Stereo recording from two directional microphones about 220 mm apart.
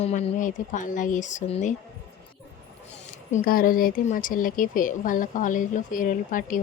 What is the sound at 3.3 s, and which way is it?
Speech, 35° left (ahead or behind).